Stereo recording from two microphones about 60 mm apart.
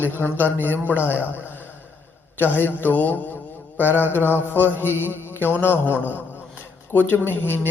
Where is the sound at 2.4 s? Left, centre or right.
Left.